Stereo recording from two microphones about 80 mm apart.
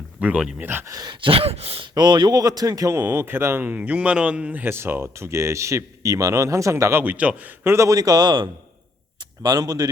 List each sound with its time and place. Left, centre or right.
0.2 s speech: centre
0.6 s a man's voice: right
0.9 s speech: right
1.8 s a man's voice: right; by 4.6 s centre
4.6 s a man's voice: right
7.0 s a man's voice: centre
7.6 s a man's voice: right
7.9 s a man's voice: right